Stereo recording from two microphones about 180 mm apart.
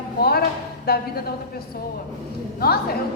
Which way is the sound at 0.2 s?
60° left (ahead or behind).